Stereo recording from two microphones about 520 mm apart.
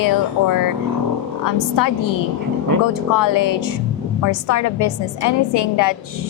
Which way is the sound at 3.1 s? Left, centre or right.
Left.